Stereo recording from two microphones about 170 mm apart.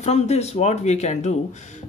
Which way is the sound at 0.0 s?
40° left (ahead or behind).